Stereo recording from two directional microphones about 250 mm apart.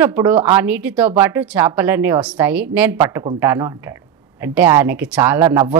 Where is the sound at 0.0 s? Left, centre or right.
Centre.